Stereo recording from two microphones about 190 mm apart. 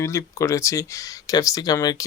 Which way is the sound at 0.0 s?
15° left (ahead or behind).